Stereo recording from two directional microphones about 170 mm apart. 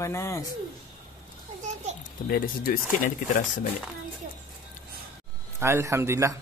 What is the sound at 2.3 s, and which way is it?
Speech, 55° left (ahead or behind).